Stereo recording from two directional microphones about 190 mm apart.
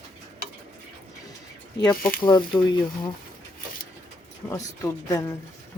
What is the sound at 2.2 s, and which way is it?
Speech, 25° left (ahead or behind).